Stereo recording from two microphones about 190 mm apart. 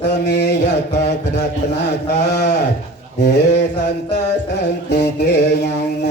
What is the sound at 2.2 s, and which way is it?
Mantra, 60° left (ahead or behind).